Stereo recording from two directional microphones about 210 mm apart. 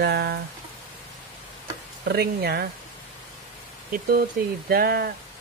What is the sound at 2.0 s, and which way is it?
Speech, 50° right (ahead or behind).